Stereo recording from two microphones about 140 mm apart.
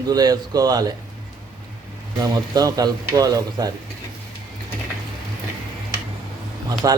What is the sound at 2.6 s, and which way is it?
A man's voice, 25° right (ahead or behind).